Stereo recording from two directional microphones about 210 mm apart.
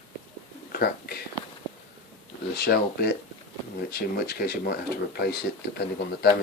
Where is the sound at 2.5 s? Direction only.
50° left (ahead or behind).